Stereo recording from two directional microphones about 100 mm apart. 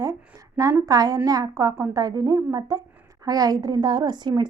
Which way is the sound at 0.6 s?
35° right (ahead or behind).